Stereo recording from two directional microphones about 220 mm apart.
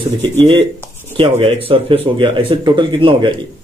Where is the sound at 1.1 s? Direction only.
25° right (ahead or behind).